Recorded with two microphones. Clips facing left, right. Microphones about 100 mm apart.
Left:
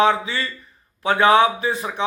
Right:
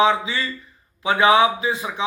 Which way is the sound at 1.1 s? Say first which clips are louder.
Left 1 dB; 10° right (ahead or behind).